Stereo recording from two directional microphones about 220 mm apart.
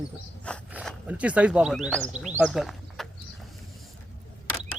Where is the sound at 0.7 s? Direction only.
5° right (ahead or behind).